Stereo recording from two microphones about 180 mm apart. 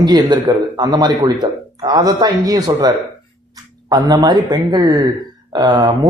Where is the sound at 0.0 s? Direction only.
25° right (ahead or behind).